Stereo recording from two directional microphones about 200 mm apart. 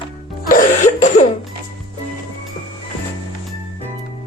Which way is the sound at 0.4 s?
40° left (ahead or behind).